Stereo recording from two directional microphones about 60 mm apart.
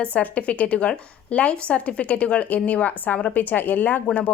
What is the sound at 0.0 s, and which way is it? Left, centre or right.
Speech, left.